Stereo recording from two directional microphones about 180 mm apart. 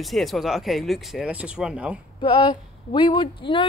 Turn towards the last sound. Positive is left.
turn(degrees=25)  # may be behind; listen again after turning